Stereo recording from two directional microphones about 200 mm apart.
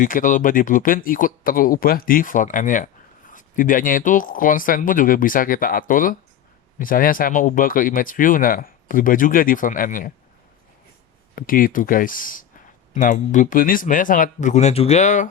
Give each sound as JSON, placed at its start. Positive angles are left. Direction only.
{"t": 0.0, "sound": "speech", "side_deg": 40}
{"t": 11.3, "sound": "speech", "side_deg": 45}